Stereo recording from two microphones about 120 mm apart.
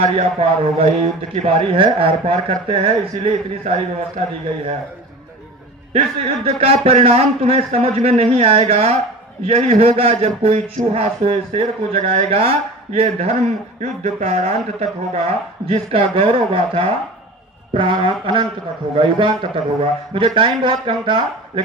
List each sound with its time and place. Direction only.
0.0 s a man's voice: 55° right (ahead or behind)
5.9 s a man's voice: 55° right (ahead or behind)
13.8 s a man's voice: 75° right (ahead or behind)
15.6 s a man's voice: 55° right (ahead or behind)